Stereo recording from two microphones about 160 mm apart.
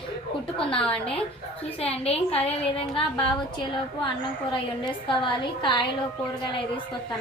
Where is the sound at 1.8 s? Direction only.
40° left (ahead or behind).